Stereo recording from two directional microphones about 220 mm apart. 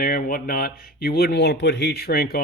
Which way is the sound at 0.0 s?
40° left (ahead or behind).